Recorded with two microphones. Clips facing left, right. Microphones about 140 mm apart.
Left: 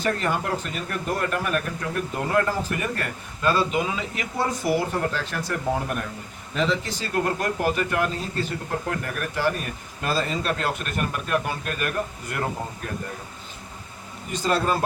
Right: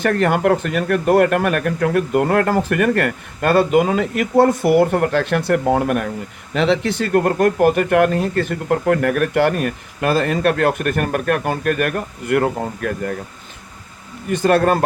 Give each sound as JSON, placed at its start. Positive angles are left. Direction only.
{"t": 0.0, "sound": "speech", "side_deg": -65}
{"t": 14.3, "sound": "speech", "side_deg": -60}